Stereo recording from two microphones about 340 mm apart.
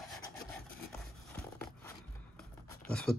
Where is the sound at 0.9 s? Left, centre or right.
Centre.